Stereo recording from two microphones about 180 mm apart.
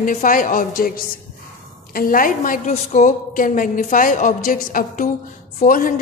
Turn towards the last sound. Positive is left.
turn(degrees=50)  # may be behind; listen again after turning